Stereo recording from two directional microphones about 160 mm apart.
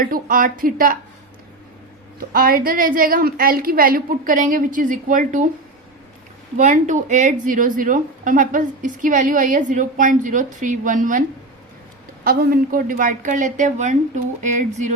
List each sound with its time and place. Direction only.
0.0 s a woman's voice: 60° right (ahead or behind)
2.1 s a woman's voice: 65° right (ahead or behind)
6.6 s a woman's voice: 50° right (ahead or behind)
12.2 s a woman's voice: 70° right (ahead or behind); by 14.9 s 50° right (ahead or behind)